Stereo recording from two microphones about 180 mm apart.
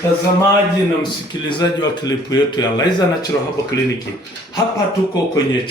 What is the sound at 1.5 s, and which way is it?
A man's voice, 25° left (ahead or behind).